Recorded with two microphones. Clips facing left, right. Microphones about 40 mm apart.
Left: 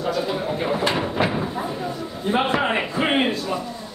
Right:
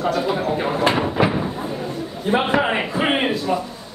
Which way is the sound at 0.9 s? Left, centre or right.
Centre.